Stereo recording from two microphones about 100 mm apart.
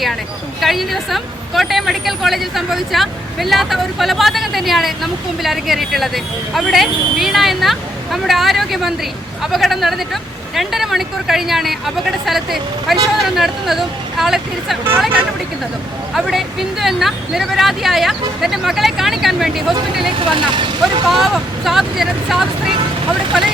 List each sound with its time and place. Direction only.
0.6 s speech: centre (ahead or behind)
16.1 s speech: centre (ahead or behind)
20.3 s speech: 55° right (ahead or behind)
21.1 s speech: centre (ahead or behind)